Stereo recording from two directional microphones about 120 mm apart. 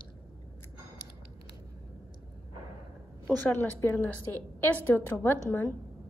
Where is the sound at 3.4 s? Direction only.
15° left (ahead or behind).